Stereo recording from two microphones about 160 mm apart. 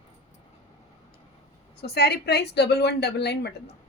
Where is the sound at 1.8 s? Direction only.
90° left.